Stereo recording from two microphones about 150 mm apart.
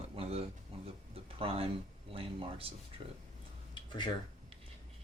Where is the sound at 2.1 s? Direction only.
40° right (ahead or behind).